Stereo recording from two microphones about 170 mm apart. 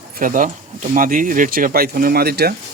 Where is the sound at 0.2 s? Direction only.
50° right (ahead or behind); by 2.6 s 70° right (ahead or behind).